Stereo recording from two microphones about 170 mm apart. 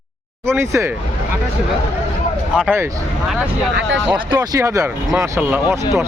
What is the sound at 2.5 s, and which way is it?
Speech, 5° right (ahead or behind).